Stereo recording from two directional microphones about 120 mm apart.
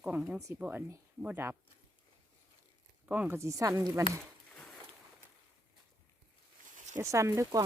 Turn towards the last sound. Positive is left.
turn(degrees=-30)  # may be behind; listen again after turning